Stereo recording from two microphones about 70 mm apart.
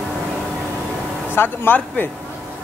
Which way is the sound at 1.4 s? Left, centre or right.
Left.